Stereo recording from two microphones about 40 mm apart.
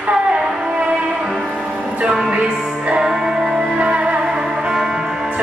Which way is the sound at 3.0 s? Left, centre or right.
Centre.